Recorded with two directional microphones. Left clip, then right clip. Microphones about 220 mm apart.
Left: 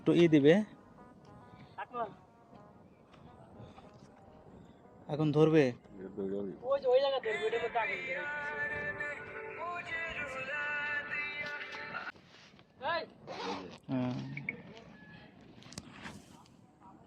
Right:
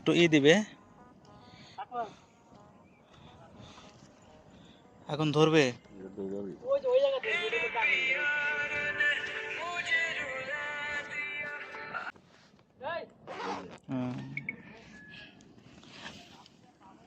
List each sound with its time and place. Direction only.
0.0 s a man's voice: 5° left (ahead or behind)
1.7 s a sound: 10° left (ahead or behind)
5.0 s a man's voice: centre (ahead or behind)
6.7 s a man's voice: 15° left (ahead or behind)
7.3 s speech: 15° right (ahead or behind)
7.6 s a man's voice: 15° left (ahead or behind)
8.1 s music: 20° right (ahead or behind)
12.8 s vehicle: 5° left (ahead or behind)
13.2 s zipper: 20° right (ahead or behind)
13.8 s a sound: 5° left (ahead or behind)